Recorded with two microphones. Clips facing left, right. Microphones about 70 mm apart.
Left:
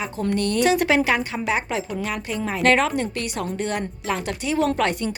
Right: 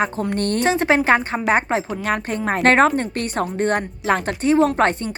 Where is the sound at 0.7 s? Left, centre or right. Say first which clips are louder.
Right 5 dB; right.